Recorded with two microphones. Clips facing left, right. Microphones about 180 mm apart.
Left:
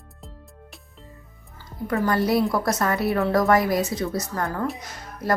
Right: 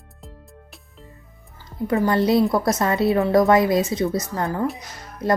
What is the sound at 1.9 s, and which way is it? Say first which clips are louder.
Speech: right 3 dB; 20° right (ahead or behind).